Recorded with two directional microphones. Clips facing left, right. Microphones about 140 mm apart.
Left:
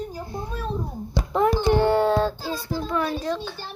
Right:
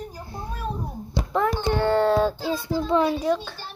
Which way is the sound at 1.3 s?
20° left (ahead or behind).